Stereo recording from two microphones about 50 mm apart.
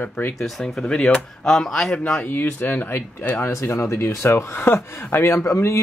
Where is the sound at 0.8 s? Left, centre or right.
Centre.